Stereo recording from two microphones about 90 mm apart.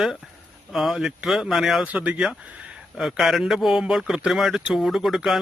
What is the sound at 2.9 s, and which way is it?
A man's voice, centre (ahead or behind).